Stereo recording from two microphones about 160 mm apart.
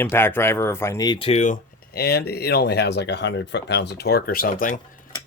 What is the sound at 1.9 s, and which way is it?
Speech, 75° left (ahead or behind).